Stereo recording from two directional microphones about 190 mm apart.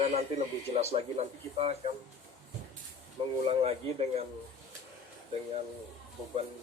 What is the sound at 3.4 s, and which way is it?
Speech, 30° right (ahead or behind).